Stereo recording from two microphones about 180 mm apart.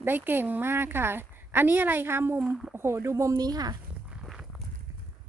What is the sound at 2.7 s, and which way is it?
A woman's voice, 15° right (ahead or behind).